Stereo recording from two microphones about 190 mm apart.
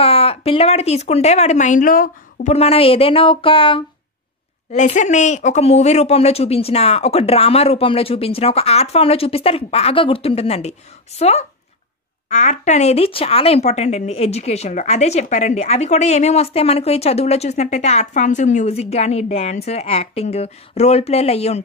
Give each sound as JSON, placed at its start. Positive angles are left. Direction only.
{"t": 0.0, "sound": "a woman's voice", "side_deg": 30}
{"t": 2.5, "sound": "speech", "side_deg": 30}
{"t": 4.7, "sound": "speech", "side_deg": 40}